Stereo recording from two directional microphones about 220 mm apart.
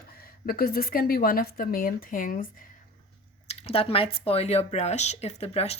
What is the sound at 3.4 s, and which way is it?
Speech, 25° left (ahead or behind).